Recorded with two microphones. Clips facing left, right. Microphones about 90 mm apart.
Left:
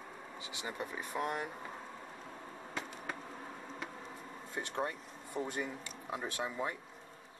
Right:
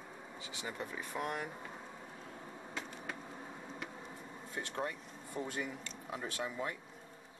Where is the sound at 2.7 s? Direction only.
Centre (ahead or behind).